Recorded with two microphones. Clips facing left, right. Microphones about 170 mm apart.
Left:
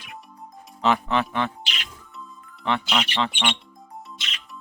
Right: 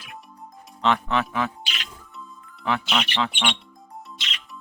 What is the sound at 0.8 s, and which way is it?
Speech, 5° left (ahead or behind).